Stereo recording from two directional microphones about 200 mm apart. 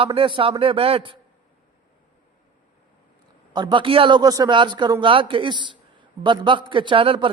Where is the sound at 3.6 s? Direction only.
20° right (ahead or behind).